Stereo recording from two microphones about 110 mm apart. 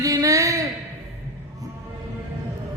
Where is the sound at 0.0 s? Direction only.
30° right (ahead or behind).